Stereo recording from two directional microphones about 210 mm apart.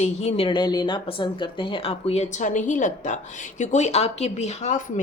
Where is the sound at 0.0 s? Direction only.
30° left (ahead or behind).